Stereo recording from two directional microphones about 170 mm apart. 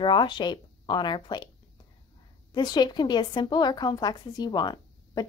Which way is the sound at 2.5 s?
25° left (ahead or behind).